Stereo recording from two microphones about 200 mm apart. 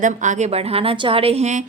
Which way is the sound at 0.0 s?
40° right (ahead or behind).